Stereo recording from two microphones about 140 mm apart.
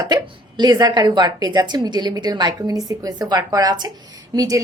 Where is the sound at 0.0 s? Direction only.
30° right (ahead or behind).